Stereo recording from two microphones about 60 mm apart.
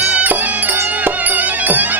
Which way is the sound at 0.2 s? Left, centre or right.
Right.